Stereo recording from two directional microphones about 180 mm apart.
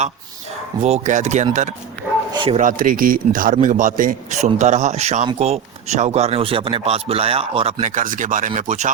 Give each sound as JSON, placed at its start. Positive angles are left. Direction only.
{"t": 0.8, "sound": "a man's voice", "side_deg": -35}
{"t": 2.3, "sound": "bow-wow", "side_deg": -25}
{"t": 2.6, "sound": "a man's voice", "side_deg": -50}